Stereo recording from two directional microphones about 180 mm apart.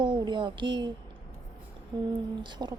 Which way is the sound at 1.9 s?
25° right (ahead or behind).